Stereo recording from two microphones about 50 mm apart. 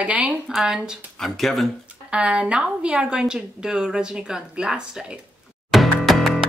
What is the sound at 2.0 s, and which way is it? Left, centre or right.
A woman's voice, right.